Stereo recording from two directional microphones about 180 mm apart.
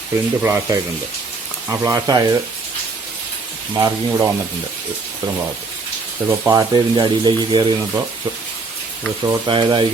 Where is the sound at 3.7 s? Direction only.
15° right (ahead or behind).